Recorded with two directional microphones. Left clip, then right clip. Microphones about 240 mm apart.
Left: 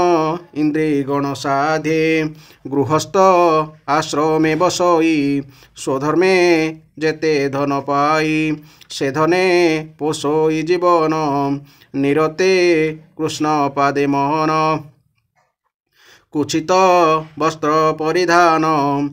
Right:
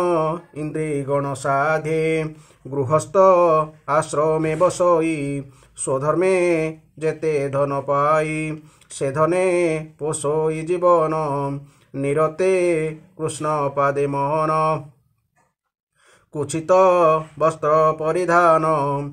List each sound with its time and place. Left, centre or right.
0.0 s mantra: left
2.7 s speech: left
16.3 s speech: left